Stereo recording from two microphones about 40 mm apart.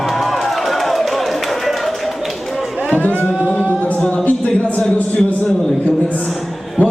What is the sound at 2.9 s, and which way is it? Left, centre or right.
Speech, left.